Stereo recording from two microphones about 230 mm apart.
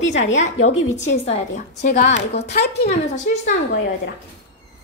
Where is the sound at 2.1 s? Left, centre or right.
Left.